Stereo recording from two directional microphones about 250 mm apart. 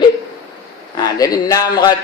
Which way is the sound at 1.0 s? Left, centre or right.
Centre.